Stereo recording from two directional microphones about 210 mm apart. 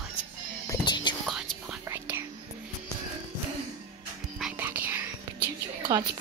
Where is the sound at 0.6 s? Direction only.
20° left (ahead or behind).